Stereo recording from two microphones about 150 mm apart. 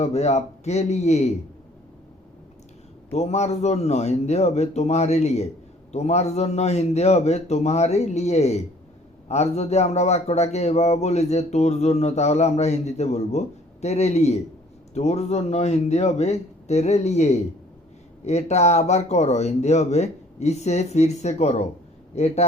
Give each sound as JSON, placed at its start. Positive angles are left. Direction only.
{"t": 0.0, "sound": "speech", "side_deg": 50}
{"t": 3.1, "sound": "speech", "side_deg": 45}